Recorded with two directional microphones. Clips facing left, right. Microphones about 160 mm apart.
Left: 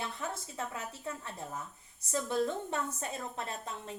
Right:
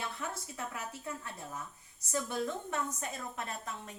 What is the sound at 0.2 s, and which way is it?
A woman's voice, 25° left (ahead or behind).